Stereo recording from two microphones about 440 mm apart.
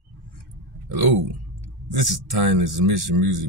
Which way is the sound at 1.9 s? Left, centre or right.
Right.